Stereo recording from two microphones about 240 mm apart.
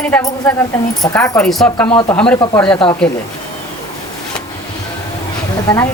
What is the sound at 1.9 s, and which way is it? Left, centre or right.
Speech, centre.